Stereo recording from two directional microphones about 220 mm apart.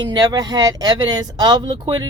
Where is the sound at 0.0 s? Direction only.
20° right (ahead or behind).